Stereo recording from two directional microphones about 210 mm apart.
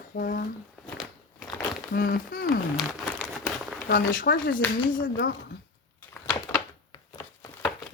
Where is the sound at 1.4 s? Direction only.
Centre (ahead or behind).